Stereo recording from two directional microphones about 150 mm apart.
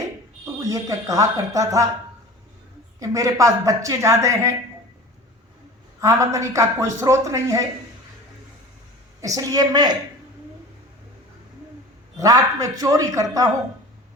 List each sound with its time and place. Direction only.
0.6 s a woman's voice: 25° right (ahead or behind)
3.0 s a woman's voice: 20° right (ahead or behind)
6.0 s a woman's voice: 20° right (ahead or behind)
9.2 s a woman's voice: 25° right (ahead or behind)
12.1 s a woman's voice: 25° right (ahead or behind)